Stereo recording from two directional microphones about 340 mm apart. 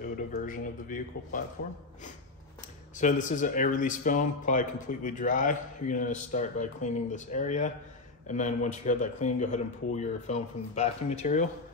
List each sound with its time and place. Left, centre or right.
0.3 s speech: left
3.0 s speech: left